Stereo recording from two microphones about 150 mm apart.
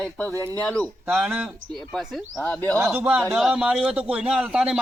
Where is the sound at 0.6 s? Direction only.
10° left (ahead or behind).